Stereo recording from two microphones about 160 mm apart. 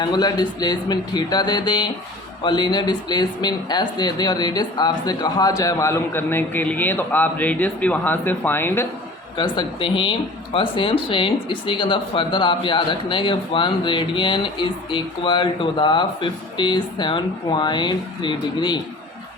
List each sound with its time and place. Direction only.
0.0 s speech: 25° left (ahead or behind)
9.4 s speech: 30° left (ahead or behind)